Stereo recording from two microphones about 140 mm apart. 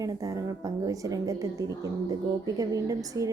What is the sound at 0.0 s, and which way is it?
Speech, 25° right (ahead or behind).